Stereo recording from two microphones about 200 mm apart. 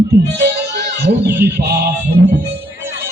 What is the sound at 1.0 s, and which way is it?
Speech, 50° right (ahead or behind).